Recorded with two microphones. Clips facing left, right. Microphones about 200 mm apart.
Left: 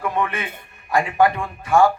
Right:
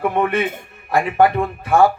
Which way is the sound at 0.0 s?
55° right (ahead or behind).